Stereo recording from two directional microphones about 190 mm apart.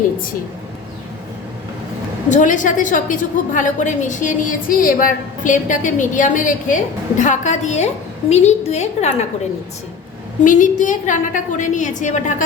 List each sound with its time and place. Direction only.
2.3 s a woman's voice: 40° left (ahead or behind)
10.4 s a woman's voice: 45° left (ahead or behind)